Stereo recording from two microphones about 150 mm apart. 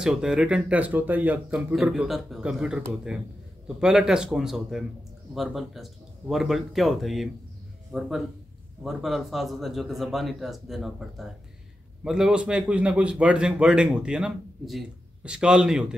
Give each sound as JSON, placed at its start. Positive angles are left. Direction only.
{"t": 0.0, "sound": "a man's voice", "side_deg": -5}